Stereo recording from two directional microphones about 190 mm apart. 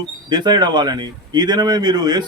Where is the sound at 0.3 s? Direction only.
20° right (ahead or behind).